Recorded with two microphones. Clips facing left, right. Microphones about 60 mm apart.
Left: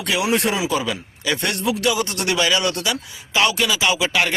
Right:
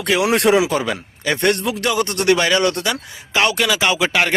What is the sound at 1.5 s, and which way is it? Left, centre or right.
A man's voice, right.